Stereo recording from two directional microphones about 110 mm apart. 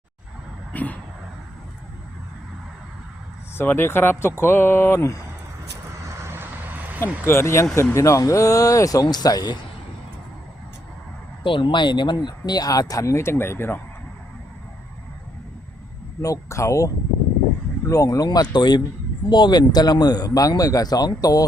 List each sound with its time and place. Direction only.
0.7 s vehicle: 15° left (ahead or behind)
3.6 s speech: 20° left (ahead or behind)
6.2 s vehicle: 20° right (ahead or behind)
7.3 s speech: 25° left (ahead or behind)
11.4 s speech: 50° left (ahead or behind); by 13.8 s 20° left (ahead or behind)
16.2 s speech: 30° left (ahead or behind)